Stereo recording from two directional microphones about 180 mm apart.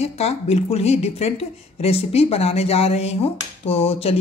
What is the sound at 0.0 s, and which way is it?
Speech, 35° left (ahead or behind).